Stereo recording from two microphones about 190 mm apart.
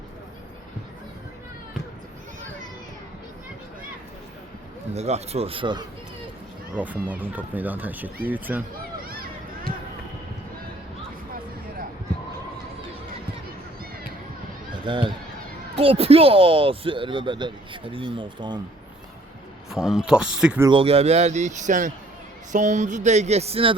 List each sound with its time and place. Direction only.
4.9 s speech: 35° right (ahead or behind)
6.7 s speech: 10° right (ahead or behind)
14.7 s a sound: 25° right (ahead or behind)
15.7 s speech: 30° right (ahead or behind)
19.7 s speech: centre (ahead or behind)
20.7 s speech: 30° right (ahead or behind)